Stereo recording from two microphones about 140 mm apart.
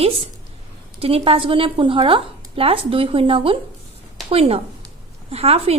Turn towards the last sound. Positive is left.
turn(degrees=-45)  # may be behind; listen again after turning